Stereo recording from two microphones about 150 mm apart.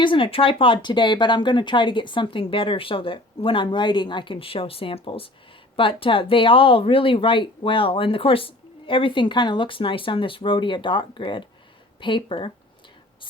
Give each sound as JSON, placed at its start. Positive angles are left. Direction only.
{"t": 0.0, "sound": "speech", "side_deg": 35}